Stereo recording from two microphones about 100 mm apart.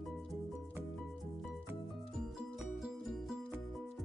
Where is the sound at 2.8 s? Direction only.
5° right (ahead or behind).